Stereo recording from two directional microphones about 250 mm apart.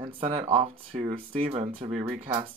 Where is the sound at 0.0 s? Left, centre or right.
Right.